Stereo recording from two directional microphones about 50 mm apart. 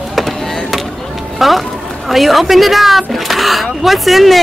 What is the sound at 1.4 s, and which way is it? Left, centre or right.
A woman's voice, centre.